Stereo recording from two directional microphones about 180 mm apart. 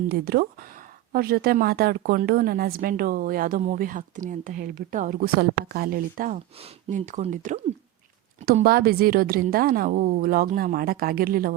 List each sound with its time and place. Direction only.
0.1 s a woman's voice: 60° right (ahead or behind); by 7.6 s 40° right (ahead or behind)
8.6 s a woman's voice: 55° right (ahead or behind)